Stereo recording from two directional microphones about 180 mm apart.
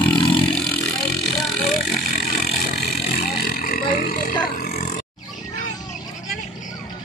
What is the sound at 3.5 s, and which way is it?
Burping, 55° left (ahead or behind).